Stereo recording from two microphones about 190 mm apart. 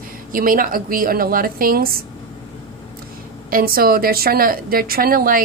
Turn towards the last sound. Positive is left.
turn(degrees=-50)  # may be behind; listen again after turning